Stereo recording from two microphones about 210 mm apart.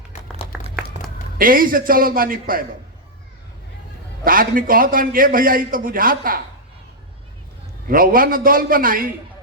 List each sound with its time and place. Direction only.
0.9 s a sound: 25° right (ahead or behind)
1.4 s a man's voice: 40° right (ahead or behind)
4.2 s a man's voice: 40° right (ahead or behind)
7.9 s a man's voice: 40° right (ahead or behind)